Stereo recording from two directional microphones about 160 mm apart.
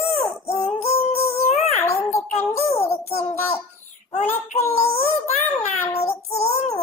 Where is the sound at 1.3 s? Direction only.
40° left (ahead or behind).